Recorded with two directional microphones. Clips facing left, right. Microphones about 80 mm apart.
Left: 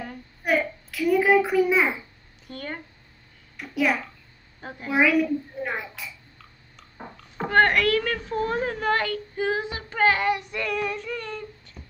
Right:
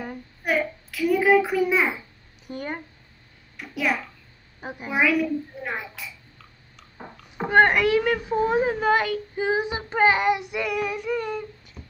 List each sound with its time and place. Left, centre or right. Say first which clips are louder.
0.4 s a sound: left 1 dB; centre
2.4 s speech: right 3 dB; centre
3.5 s a child's voice: left 2 dB; centre
4.6 s a woman's voice: even; centre
4.9 s a child's voice: left 1 dB; centre
7.3 s a woman's voice: right 2 dB; centre